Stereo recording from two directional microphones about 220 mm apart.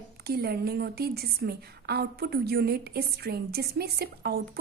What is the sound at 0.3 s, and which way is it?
A woman's voice, 45° right (ahead or behind).